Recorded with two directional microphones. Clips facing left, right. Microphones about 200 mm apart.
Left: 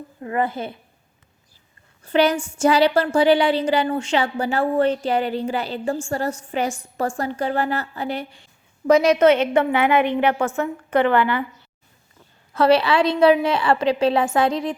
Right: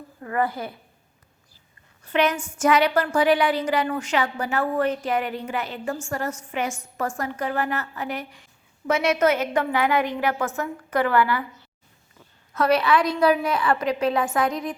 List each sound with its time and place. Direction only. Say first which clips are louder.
0.2 s a woman's voice: left 2 dB; 20° left (ahead or behind)
2.0 s a woman's voice: left 4 dB; 30° left (ahead or behind)
12.5 s a woman's voice: left 4 dB; 30° left (ahead or behind)